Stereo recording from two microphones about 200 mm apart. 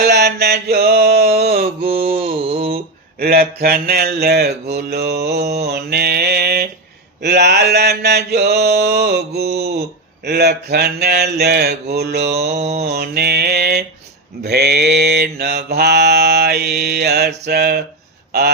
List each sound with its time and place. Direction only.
0.0 s mantra: 55° right (ahead or behind)
2.1 s mantra: 30° right (ahead or behind)
3.2 s mantra: 50° right (ahead or behind)
12.5 s mantra: 35° right (ahead or behind)
12.7 s mantra: 55° right (ahead or behind)
18.3 s a sound: 55° right (ahead or behind)